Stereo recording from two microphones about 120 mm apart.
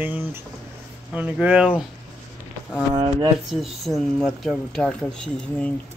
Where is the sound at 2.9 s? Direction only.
35° right (ahead or behind).